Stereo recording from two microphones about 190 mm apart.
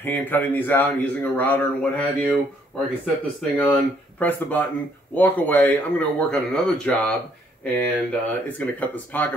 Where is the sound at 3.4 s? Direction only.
5° left (ahead or behind).